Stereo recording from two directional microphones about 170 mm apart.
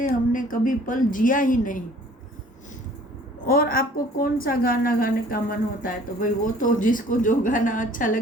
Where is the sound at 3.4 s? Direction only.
60° left (ahead or behind).